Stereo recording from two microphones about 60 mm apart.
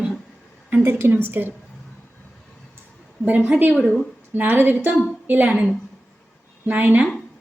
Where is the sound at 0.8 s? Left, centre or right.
Right.